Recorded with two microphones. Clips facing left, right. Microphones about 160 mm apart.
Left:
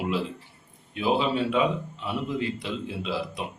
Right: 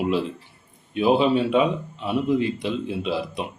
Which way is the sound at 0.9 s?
20° right (ahead or behind).